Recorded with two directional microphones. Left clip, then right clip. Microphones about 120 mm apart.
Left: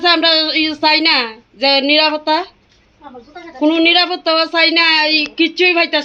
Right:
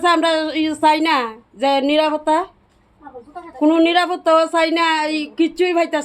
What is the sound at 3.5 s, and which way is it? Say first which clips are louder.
A woman's voice: left 3 dB; 20° right (ahead or behind).